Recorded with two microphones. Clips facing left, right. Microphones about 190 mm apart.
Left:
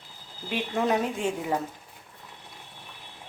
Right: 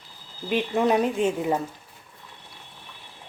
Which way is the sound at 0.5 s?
20° right (ahead or behind).